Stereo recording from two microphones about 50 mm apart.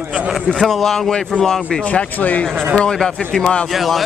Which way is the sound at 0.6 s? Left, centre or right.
Centre.